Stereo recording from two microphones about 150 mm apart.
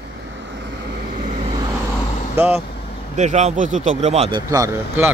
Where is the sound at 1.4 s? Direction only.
30° right (ahead or behind).